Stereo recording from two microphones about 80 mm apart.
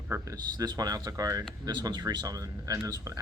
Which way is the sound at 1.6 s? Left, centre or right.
Right.